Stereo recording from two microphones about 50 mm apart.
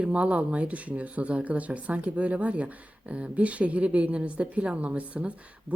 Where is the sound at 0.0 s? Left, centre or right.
Right.